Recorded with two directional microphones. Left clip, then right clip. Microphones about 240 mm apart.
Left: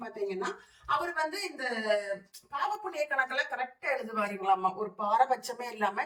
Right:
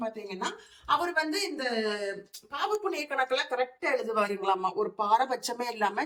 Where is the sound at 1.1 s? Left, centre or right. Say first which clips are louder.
Right 4 dB; right.